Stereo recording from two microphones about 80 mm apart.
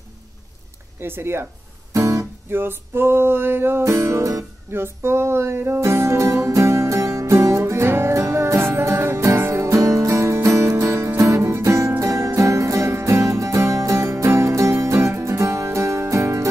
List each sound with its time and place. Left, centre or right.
0.9 s speech: right
1.9 s guitar: right
2.5 s music: right
4.7 s music: right